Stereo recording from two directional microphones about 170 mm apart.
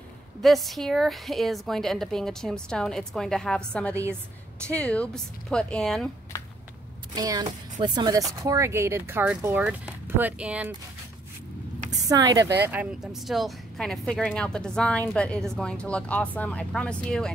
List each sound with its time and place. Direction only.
0.4 s speech: centre (ahead or behind)
7.2 s speech: 20° right (ahead or behind)
11.9 s speech: 20° right (ahead or behind)
12.6 s speech: 5° right (ahead or behind)